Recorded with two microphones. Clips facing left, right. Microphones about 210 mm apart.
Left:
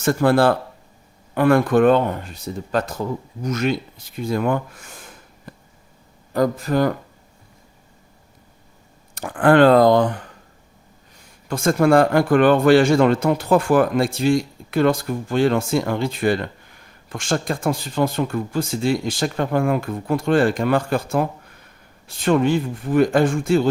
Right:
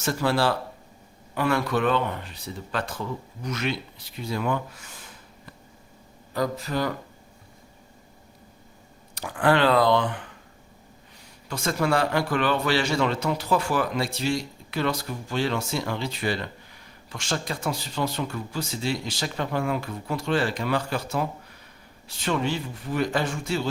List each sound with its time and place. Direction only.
0.0 s a man's voice: 55° left (ahead or behind)
9.1 s a man's voice: 50° left (ahead or behind)
11.4 s a man's voice: 50° left (ahead or behind)